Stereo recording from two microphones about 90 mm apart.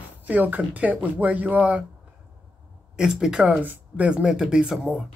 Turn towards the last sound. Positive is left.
turn(degrees=-5)  # may be behind; listen again after turning